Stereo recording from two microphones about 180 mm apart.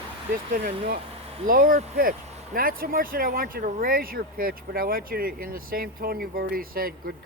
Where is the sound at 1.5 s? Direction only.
50° right (ahead or behind).